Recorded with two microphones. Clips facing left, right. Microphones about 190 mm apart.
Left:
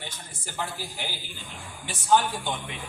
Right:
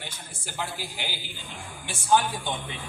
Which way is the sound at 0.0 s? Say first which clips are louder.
Even; 10° right (ahead or behind).